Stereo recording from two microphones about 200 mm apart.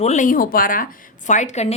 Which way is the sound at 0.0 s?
35° left (ahead or behind).